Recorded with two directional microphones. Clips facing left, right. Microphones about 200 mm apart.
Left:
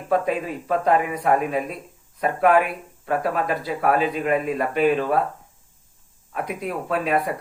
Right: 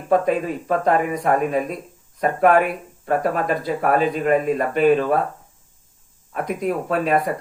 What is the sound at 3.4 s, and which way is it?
Speech, 5° left (ahead or behind).